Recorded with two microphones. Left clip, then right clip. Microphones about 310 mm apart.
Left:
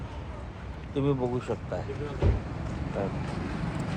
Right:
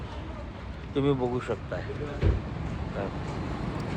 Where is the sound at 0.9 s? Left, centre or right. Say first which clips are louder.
Right 2 dB; centre.